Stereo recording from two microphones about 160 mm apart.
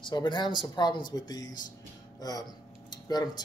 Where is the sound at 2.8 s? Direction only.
25° left (ahead or behind).